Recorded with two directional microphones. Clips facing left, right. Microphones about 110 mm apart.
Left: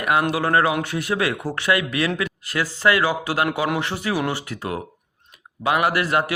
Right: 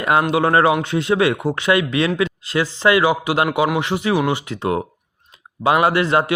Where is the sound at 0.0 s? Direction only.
25° right (ahead or behind).